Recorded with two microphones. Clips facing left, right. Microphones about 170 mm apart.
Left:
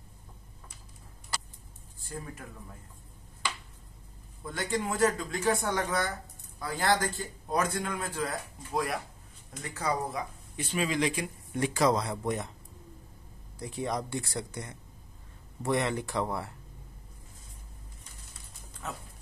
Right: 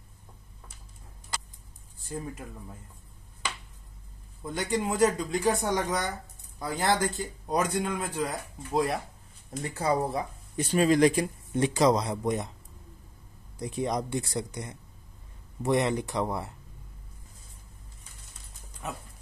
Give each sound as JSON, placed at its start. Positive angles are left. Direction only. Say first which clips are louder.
{"t": 2.0, "sound": "speech", "louder": "right 5 dB", "side_deg": -20}
{"t": 4.5, "sound": "speech", "louder": "right 3 dB", "side_deg": -20}
{"t": 10.5, "sound": "speech", "louder": "right 8 dB", "side_deg": -40}
{"t": 11.5, "sound": "speech", "louder": "right 3 dB", "side_deg": -20}
{"t": 13.6, "sound": "speech", "louder": "right 3 dB", "side_deg": -20}
{"t": 18.8, "sound": "speech", "louder": "right 2 dB", "side_deg": -15}